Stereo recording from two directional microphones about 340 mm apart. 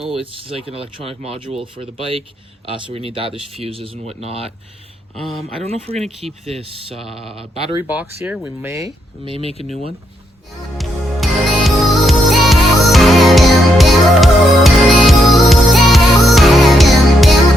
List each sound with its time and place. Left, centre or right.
0.1 s speech: centre
6.0 s speech: centre
6.4 s speech: centre
9.4 s speech: centre
10.8 s music: centre